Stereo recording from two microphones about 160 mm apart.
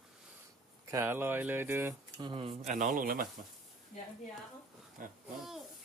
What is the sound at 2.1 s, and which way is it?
Speech, 30° right (ahead or behind).